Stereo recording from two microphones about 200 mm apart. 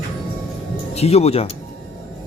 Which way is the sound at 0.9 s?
30° left (ahead or behind).